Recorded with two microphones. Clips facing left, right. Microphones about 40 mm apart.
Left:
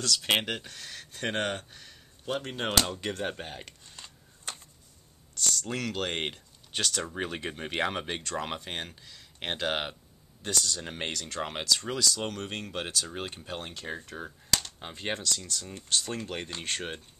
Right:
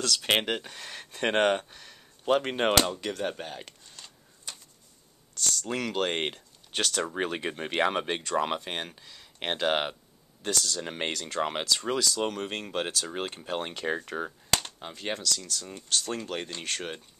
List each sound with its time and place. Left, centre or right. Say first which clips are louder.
0.0 s speech: right 1 dB; centre
0.8 s speech: right 5 dB; right
1.7 s speech: right 1 dB; centre
2.2 s speech: right 7 dB; right
3.0 s speech: right 1 dB; centre
5.4 s speech: right 1 dB; centre
7.1 s speech: right 4 dB; centre
13.7 s speech: right 7 dB; right
14.2 s a sound: right 2 dB; right
14.8 s speech: even; centre